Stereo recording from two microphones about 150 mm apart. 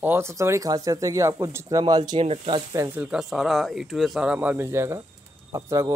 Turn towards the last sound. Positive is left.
turn(degrees=-20)  # may be behind; listen again after turning